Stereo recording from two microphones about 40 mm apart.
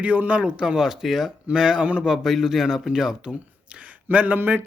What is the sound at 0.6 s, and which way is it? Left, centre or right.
Speech, centre.